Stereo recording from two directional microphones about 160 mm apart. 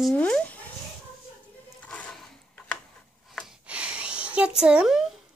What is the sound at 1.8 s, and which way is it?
Music, 5° left (ahead or behind).